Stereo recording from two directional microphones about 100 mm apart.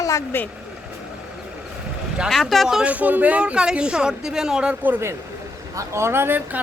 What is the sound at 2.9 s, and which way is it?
Speech, 15° right (ahead or behind).